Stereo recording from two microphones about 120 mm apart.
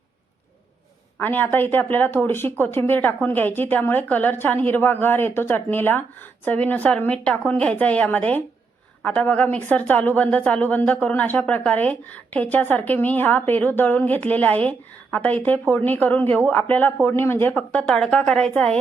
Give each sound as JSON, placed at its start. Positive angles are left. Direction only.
{"t": 1.2, "sound": "a woman's voice", "side_deg": 15}